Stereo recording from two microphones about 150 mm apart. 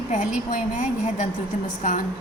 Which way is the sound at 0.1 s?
55° left (ahead or behind).